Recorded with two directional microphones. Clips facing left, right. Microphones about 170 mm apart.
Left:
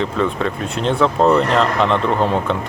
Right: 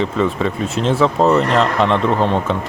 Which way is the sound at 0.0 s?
Centre (ahead or behind).